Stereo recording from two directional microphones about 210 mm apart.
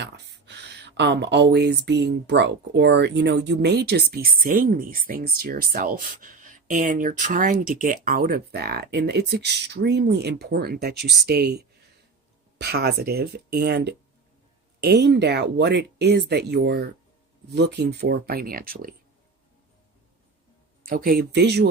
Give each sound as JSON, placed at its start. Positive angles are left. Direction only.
{"t": 0.0, "sound": "speech", "side_deg": -55}
{"t": 20.8, "sound": "speech", "side_deg": -45}